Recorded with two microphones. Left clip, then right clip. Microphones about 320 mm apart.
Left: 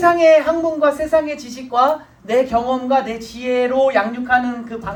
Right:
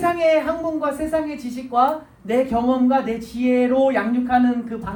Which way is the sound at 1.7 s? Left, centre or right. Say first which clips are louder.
Left 3 dB; left.